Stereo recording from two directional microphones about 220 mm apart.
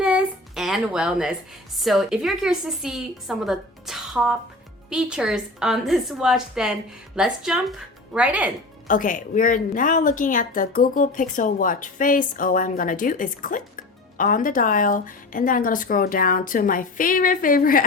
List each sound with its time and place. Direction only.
0.0 s a sound: 5° right (ahead or behind)
1.8 s a woman's voice: centre (ahead or behind)
8.9 s speech: 35° left (ahead or behind)